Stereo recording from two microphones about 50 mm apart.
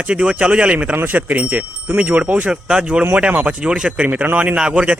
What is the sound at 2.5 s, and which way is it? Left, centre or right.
Speech, centre.